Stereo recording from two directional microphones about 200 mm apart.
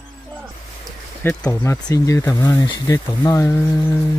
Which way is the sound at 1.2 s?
15° left (ahead or behind).